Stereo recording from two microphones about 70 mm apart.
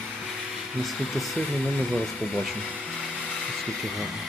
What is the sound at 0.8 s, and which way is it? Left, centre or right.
Speech, centre.